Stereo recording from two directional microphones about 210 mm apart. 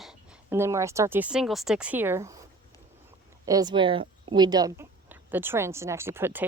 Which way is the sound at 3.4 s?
15° right (ahead or behind).